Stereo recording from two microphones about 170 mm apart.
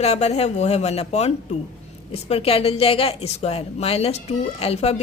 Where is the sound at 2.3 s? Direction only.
35° left (ahead or behind).